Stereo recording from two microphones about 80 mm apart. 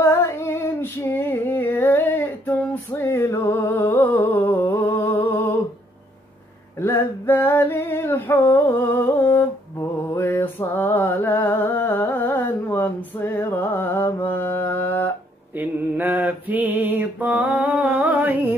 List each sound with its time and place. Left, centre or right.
0.0 s female singing: left
6.8 s a sound: left
9.8 s mantra: left
15.5 s mantra: right
17.6 s music: centre